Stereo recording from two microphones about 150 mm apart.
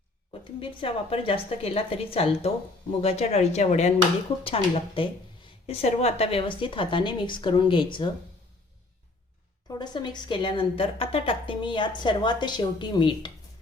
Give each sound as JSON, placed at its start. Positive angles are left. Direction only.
{"t": 0.6, "sound": "a woman's voice", "side_deg": 35}
{"t": 4.4, "sound": "a woman's voice", "side_deg": 35}
{"t": 9.6, "sound": "a woman's voice", "side_deg": 30}